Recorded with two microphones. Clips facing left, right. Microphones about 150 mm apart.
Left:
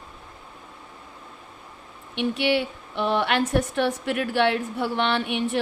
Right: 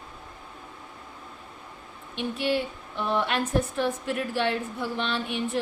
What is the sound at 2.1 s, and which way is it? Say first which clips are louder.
A woman's voice: left 4 dB; 80° left.